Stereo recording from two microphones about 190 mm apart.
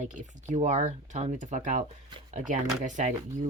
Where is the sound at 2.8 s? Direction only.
40° right (ahead or behind).